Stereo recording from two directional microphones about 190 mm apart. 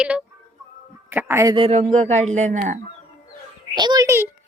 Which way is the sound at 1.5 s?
35° right (ahead or behind).